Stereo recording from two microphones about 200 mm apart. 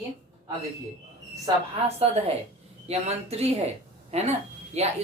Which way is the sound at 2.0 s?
30° right (ahead or behind).